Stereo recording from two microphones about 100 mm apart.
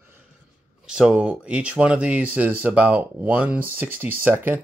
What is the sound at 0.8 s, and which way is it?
Speech, 10° right (ahead or behind).